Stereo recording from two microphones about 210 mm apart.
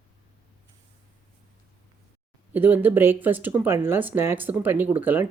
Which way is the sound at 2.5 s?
10° right (ahead or behind).